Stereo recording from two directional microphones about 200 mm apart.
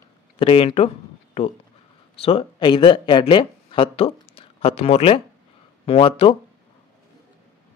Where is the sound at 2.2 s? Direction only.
30° left (ahead or behind).